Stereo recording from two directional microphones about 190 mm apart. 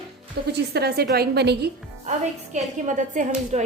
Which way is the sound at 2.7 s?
40° right (ahead or behind).